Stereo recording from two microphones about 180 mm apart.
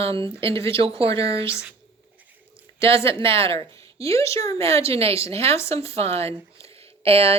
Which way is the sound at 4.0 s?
15° left (ahead or behind).